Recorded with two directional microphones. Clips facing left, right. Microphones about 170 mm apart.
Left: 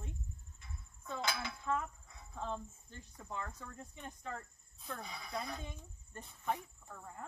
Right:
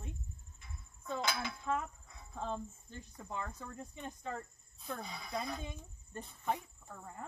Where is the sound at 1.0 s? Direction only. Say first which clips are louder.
Right 2 dB; 20° right (ahead or behind).